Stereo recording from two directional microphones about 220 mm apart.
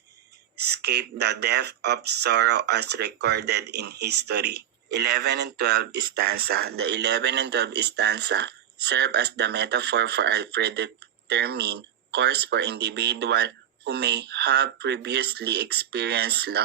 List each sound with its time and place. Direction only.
0.5 s speech: 50° right (ahead or behind)